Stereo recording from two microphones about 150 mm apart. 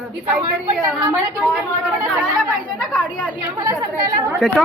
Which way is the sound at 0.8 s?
15° right (ahead or behind).